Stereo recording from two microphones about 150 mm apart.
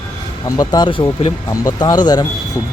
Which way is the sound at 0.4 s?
25° left (ahead or behind).